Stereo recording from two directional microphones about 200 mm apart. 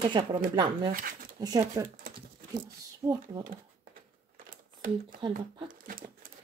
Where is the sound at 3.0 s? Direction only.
20° right (ahead or behind).